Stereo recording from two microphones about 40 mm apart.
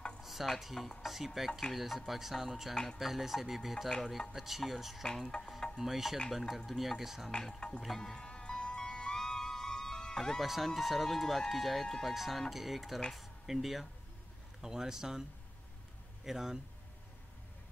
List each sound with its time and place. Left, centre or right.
0.2 s stir: centre
0.6 s speech: centre
2.7 s speech: centre
3.0 s speech: centre
5.3 s music: left
5.8 s speech: centre
7.2 s speech: centre
8.0 s music: left
10.4 s speech: centre
16.3 s speech: centre